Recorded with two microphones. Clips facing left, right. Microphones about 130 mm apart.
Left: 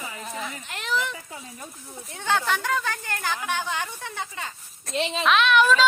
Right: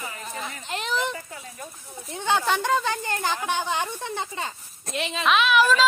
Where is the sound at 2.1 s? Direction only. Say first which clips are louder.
Right 2 dB; 15° right (ahead or behind).